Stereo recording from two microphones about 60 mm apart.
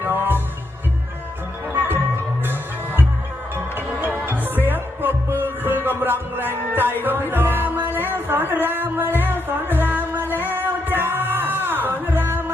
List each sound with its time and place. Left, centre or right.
0.0 s music: right
1.7 s music: right
3.8 s music: right
10.2 s singing: right